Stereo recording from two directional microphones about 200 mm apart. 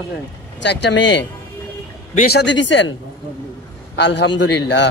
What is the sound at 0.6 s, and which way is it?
Speech, 60° left (ahead or behind).